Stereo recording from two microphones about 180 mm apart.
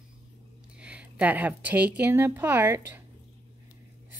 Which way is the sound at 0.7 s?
5° right (ahead or behind).